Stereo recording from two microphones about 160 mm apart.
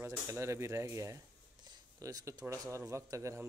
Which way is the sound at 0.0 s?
15° right (ahead or behind).